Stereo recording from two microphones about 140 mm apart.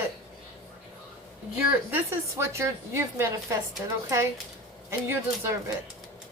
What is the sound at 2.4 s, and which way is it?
Speech, 20° right (ahead or behind).